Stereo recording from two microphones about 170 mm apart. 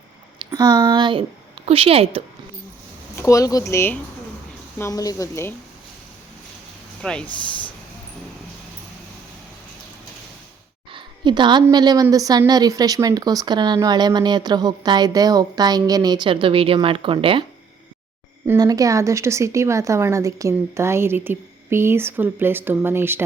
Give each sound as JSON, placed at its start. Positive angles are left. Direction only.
{"t": 0.3, "sound": "speech", "side_deg": -25}
{"t": 3.2, "sound": "speech", "side_deg": 20}
{"t": 7.0, "sound": "speech", "side_deg": 5}
{"t": 10.9, "sound": "a woman's voice", "side_deg": -25}
{"t": 18.4, "sound": "a woman's voice", "side_deg": -20}